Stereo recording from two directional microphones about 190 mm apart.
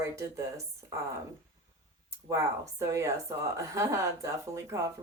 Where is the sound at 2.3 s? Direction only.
15° right (ahead or behind).